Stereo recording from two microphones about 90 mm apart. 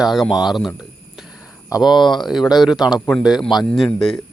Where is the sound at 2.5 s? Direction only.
5° right (ahead or behind).